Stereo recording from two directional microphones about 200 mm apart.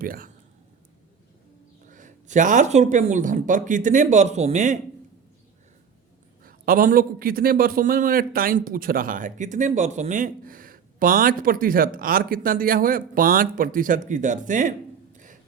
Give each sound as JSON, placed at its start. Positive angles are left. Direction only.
{"t": 0.0, "sound": "a man's voice", "side_deg": -45}
{"t": 1.9, "sound": "speech", "side_deg": -40}
{"t": 6.4, "sound": "a man's voice", "side_deg": -45}
{"t": 15.1, "sound": "a sound", "side_deg": -40}